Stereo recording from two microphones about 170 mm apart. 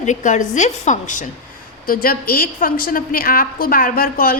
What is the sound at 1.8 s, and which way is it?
A woman's voice, 55° left (ahead or behind).